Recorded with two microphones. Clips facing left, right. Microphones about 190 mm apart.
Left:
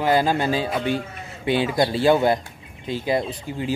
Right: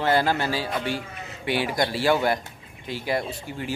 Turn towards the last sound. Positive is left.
turn(degrees=20)  # may be behind; listen again after turning